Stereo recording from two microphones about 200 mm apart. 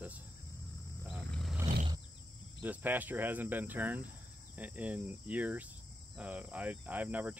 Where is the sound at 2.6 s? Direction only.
10° right (ahead or behind).